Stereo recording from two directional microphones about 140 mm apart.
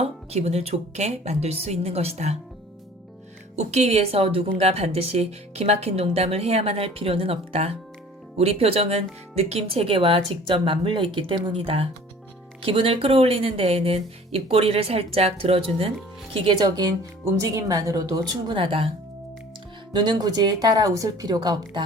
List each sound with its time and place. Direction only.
0.0 s speech: 50° right (ahead or behind)
3.5 s speech: 50° right (ahead or behind)
19.9 s speech: 30° right (ahead or behind)